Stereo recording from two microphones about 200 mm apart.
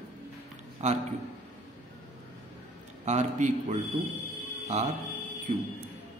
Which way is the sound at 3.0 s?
35° right (ahead or behind).